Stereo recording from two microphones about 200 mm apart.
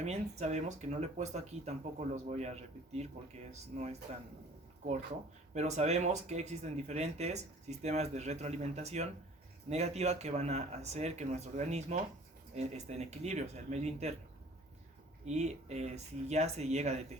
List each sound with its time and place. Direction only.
0.0 s speech: 35° right (ahead or behind)
4.1 s speech: 35° right (ahead or behind)
5.5 s speech: 35° right (ahead or behind)
15.2 s speech: 35° right (ahead or behind)